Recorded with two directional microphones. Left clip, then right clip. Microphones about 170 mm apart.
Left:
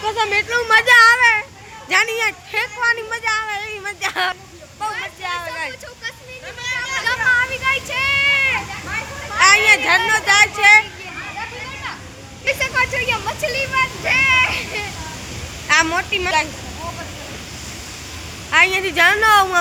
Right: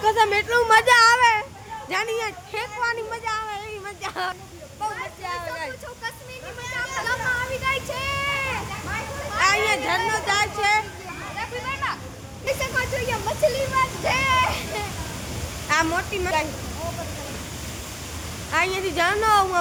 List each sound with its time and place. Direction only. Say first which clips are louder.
0.0 s a child's voice: left 1 dB; 25° right (ahead or behind)
1.9 s speech: left 9 dB; centre (ahead or behind)
4.8 s a sound: left 5 dB; centre (ahead or behind)
6.8 s a sound: left 5 dB; 35° right (ahead or behind)
7.5 s speech: left 5 dB; 10° right (ahead or behind)
7.9 s speech: left 9 dB; 35° right (ahead or behind)
8.2 s a sound: left 11 dB; 45° right (ahead or behind)
9.3 s speech: left 9 dB; centre (ahead or behind)
12.5 s speech: left 6 dB; 30° right (ahead or behind)
15.6 s speech: left 6 dB; 5° right (ahead or behind)
18.5 s speech: left 8 dB; centre (ahead or behind)